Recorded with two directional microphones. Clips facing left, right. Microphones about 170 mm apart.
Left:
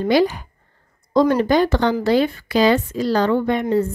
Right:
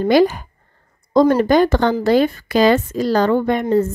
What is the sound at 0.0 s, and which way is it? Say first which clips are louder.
Speech: right 3 dB; 45° right (ahead or behind).